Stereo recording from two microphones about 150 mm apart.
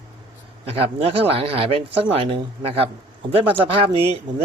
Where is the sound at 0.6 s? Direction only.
40° right (ahead or behind).